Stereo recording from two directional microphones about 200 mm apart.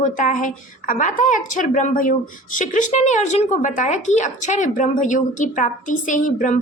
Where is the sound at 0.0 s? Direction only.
40° left (ahead or behind).